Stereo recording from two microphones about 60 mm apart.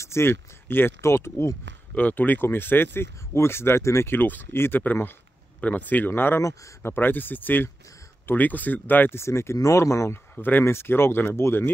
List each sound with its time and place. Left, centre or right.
0.0 s a sound: left
1.0 s speech: left
2.0 s speech: left
4.1 s speech: left
5.6 s speech: left
9.2 s speech: left
9.6 s speech: left